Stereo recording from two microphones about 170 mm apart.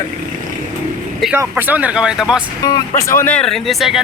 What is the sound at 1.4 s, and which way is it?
Speech, 10° right (ahead or behind).